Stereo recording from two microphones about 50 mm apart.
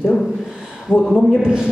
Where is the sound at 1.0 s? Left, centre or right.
Centre.